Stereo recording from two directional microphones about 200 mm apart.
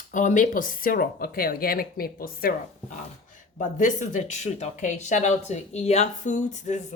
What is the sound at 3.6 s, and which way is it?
A woman's voice, 40° left (ahead or behind).